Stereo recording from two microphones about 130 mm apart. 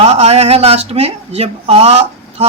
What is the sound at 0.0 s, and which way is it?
Speech, 55° right (ahead or behind).